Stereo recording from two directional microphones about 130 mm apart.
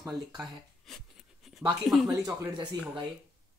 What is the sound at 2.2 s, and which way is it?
Speech, 30° right (ahead or behind).